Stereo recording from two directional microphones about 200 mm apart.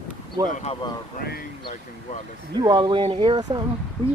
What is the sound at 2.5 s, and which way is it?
Speech, 20° right (ahead or behind).